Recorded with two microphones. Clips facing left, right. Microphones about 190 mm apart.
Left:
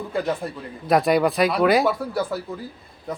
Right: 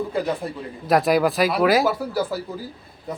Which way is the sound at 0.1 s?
Centre (ahead or behind).